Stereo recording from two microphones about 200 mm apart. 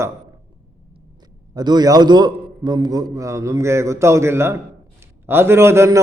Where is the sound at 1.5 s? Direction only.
20° right (ahead or behind).